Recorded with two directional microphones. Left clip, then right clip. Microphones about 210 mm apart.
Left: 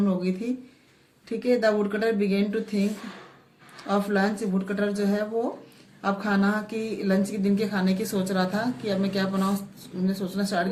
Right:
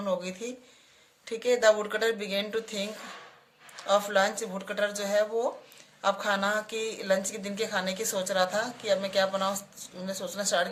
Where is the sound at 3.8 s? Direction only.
35° right (ahead or behind).